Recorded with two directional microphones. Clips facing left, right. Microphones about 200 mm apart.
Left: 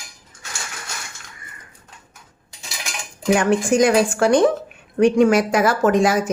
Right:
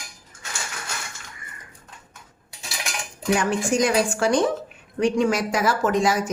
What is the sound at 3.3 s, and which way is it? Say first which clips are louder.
Speech: left 5 dB; 55° left (ahead or behind).